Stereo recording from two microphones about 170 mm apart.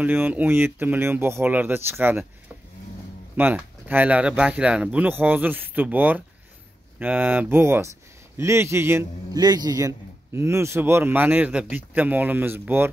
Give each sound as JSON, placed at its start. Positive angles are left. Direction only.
{"t": 0.0, "sound": "a man's voice", "side_deg": -10}
{"t": 3.3, "sound": "a man's voice", "side_deg": -10}